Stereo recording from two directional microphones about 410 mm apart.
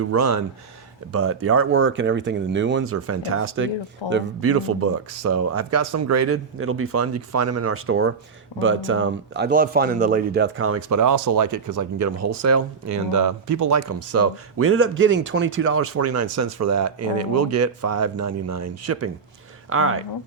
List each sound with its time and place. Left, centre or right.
0.0 s speech: right